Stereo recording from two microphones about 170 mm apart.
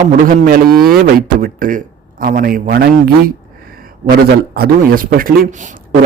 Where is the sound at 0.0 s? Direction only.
55° right (ahead or behind).